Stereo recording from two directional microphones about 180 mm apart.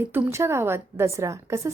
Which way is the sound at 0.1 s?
15° right (ahead or behind).